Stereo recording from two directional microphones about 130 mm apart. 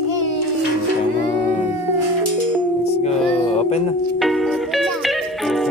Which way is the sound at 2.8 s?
55° left (ahead or behind).